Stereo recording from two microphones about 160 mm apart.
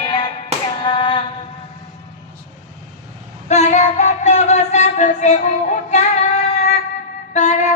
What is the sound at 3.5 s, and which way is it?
Music, 45° left (ahead or behind).